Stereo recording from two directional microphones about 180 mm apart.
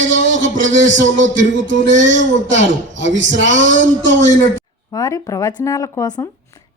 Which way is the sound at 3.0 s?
90° right.